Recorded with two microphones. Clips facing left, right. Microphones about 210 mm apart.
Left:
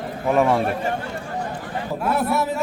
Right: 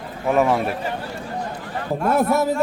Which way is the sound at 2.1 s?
40° right (ahead or behind).